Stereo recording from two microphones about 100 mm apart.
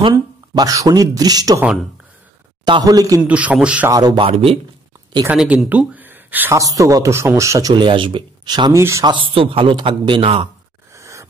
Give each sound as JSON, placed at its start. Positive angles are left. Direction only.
{"t": 0.1, "sound": "speech", "side_deg": -35}
{"t": 2.8, "sound": "speech", "side_deg": -35}
{"t": 3.2, "sound": "a man's voice", "side_deg": -15}
{"t": 3.9, "sound": "speech", "side_deg": -45}
{"t": 4.2, "sound": "a man's voice", "side_deg": -75}
{"t": 5.3, "sound": "a man's voice", "side_deg": -5}
{"t": 5.7, "sound": "gasp", "side_deg": -15}
{"t": 6.5, "sound": "speech", "side_deg": -35}
{"t": 7.7, "sound": "speech", "side_deg": -55}
{"t": 8.7, "sound": "speech", "side_deg": -30}
{"t": 9.0, "sound": "a man's voice", "side_deg": -55}
{"t": 11.0, "sound": "a sound", "side_deg": -30}